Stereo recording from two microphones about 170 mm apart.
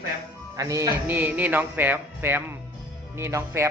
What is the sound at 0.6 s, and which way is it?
Speech, 20° right (ahead or behind).